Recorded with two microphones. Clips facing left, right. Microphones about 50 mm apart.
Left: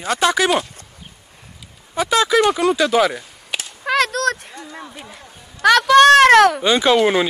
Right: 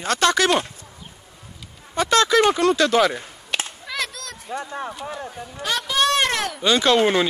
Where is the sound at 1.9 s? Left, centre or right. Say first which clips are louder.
Left 1 dB; centre.